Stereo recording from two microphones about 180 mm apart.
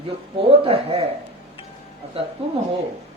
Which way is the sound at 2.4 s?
30° right (ahead or behind).